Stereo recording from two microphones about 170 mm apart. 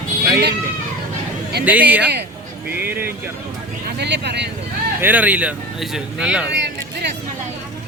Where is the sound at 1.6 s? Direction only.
10° right (ahead or behind).